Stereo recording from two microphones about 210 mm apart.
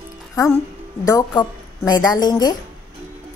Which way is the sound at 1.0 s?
15° left (ahead or behind).